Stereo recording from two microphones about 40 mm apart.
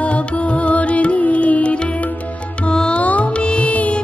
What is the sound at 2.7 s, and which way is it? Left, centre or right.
Music, centre.